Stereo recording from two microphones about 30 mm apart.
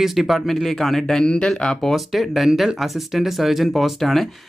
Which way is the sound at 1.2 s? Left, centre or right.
Left.